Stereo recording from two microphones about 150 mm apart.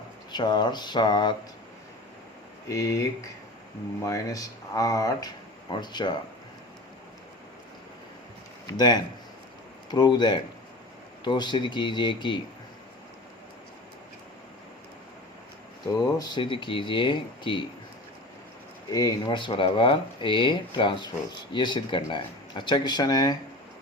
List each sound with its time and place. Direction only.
0.3 s speech: 30° left (ahead or behind)
2.7 s speech: 20° left (ahead or behind)
4.0 s speech: 20° left (ahead or behind)
8.6 s speech: 30° left (ahead or behind)
15.9 s speech: 25° left (ahead or behind)
18.9 s speech: 25° left (ahead or behind)